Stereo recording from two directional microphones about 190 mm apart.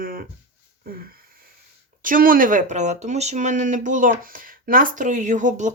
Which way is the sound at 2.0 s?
45° right (ahead or behind).